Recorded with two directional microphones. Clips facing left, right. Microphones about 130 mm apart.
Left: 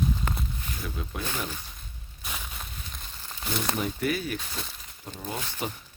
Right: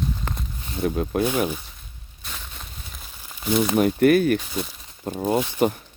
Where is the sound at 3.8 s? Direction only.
60° right (ahead or behind).